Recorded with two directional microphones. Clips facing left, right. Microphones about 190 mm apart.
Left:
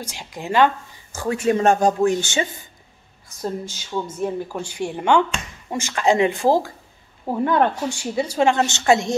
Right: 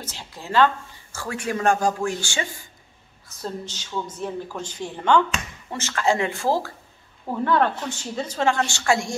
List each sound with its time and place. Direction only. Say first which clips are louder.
0.0 s speech: left 5 dB; 15° left (ahead or behind)